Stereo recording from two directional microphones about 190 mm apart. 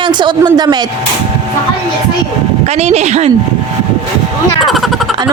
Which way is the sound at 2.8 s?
35° right (ahead or behind).